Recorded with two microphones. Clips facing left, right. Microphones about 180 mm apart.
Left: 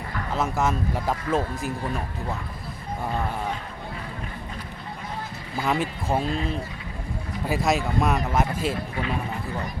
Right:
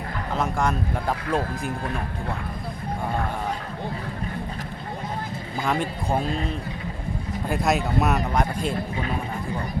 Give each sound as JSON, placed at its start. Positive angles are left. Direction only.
{"t": 0.3, "sound": "speech", "side_deg": 5}
{"t": 5.6, "sound": "speech", "side_deg": 5}
{"t": 7.4, "sound": "speech", "side_deg": 0}